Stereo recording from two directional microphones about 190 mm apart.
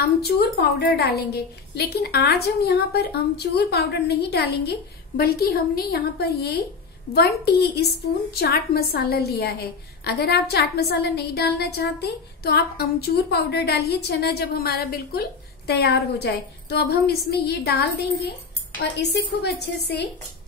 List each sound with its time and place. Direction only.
0.2 s a woman's voice: 60° left (ahead or behind)